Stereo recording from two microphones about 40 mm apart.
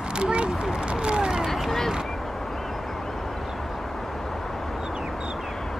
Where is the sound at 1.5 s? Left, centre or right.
Centre.